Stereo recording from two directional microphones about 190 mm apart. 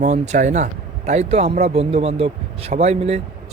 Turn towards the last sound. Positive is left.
turn(degrees=-35)  # may be behind; listen again after turning